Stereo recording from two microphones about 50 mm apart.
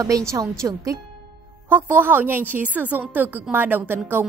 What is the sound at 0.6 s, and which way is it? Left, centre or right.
Speech, right.